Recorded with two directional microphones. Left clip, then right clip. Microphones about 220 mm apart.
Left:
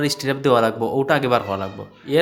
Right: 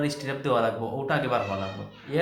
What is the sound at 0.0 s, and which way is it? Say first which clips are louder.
Speech: left 9 dB; 45° left (ahead or behind).